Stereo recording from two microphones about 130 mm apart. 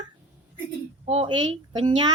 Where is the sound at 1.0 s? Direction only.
50° right (ahead or behind).